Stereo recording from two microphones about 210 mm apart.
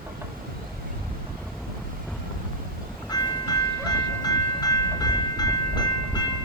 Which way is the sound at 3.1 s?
20° left (ahead or behind).